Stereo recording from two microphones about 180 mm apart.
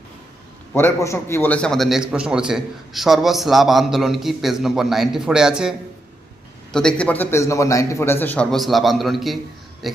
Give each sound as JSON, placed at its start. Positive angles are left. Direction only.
{"t": 0.7, "sound": "a man's voice", "side_deg": 15}
{"t": 6.7, "sound": "a man's voice", "side_deg": 5}